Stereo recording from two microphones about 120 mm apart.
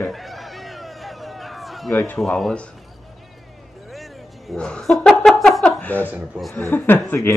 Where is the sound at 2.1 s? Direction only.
Centre (ahead or behind).